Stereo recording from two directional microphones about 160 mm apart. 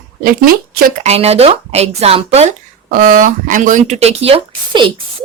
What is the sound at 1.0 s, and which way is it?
Speech, 40° right (ahead or behind).